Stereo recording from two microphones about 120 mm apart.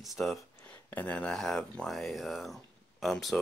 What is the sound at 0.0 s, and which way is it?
Speech, centre (ahead or behind).